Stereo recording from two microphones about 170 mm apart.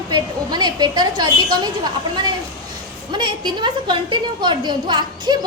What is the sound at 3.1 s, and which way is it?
A woman's voice, 25° right (ahead or behind).